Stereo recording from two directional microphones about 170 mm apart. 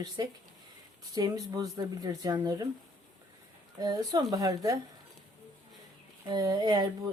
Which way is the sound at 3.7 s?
20° right (ahead or behind).